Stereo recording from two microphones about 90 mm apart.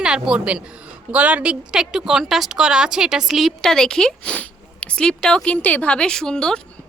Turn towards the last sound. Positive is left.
turn(degrees=10)  # may be behind; listen again after turning